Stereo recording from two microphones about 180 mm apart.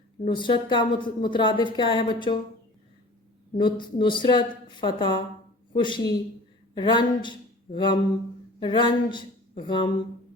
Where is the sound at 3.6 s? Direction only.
25° left (ahead or behind).